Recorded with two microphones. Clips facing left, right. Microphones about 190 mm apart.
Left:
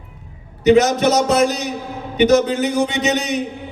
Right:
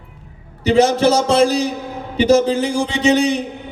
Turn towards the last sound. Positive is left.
turn(degrees=-30)  # may be behind; listen again after turning